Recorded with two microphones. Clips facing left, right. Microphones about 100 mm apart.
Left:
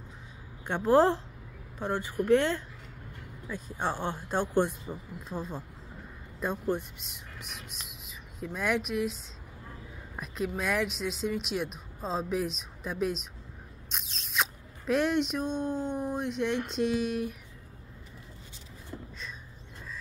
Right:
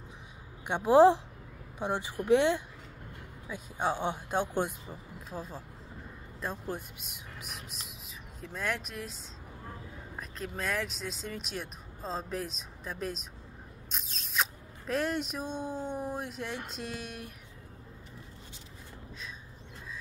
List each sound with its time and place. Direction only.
0.7 s speech: 15° right (ahead or behind); by 17.4 s centre (ahead or behind)